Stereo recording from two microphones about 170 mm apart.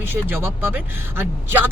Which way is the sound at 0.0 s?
10° right (ahead or behind).